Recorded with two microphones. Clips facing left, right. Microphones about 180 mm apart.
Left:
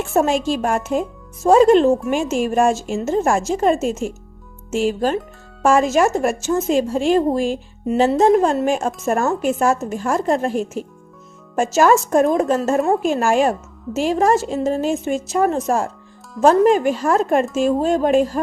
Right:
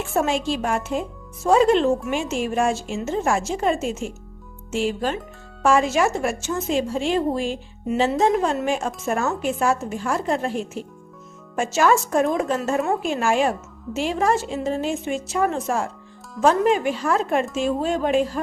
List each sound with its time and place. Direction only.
0.0 s a woman's voice: 45° left (ahead or behind)